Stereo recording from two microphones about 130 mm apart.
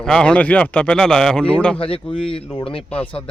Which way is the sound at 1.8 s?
45° left (ahead or behind).